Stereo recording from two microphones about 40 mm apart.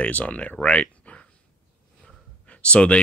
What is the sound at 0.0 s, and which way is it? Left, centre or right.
Speech, left.